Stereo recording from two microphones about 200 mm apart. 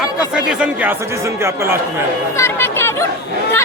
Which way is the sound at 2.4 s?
10° left (ahead or behind).